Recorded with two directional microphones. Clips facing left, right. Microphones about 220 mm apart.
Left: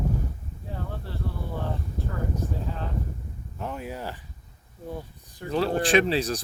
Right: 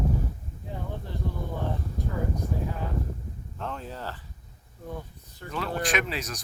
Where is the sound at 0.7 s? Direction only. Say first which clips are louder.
Even; 15° right (ahead or behind).